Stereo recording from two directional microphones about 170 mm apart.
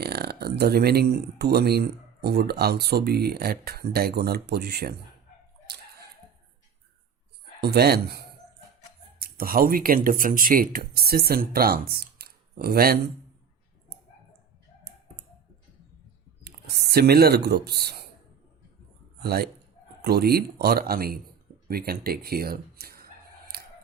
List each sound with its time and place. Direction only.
0.0 s speech: 65° right (ahead or behind)
5.7 s a sound: 75° right (ahead or behind)
7.6 s speech: 70° right (ahead or behind)
9.1 s speech: 60° right (ahead or behind)
16.4 s speech: 70° right (ahead or behind)
19.2 s speech: 65° right (ahead or behind)